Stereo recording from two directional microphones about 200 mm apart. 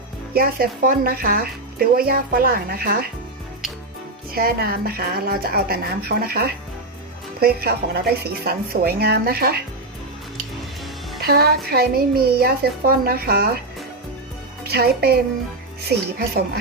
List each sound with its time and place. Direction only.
0.3 s speech: 50° right (ahead or behind)
4.3 s speech: 50° right (ahead or behind)
11.2 s speech: 50° right (ahead or behind)
14.6 s a woman's voice: 50° right (ahead or behind)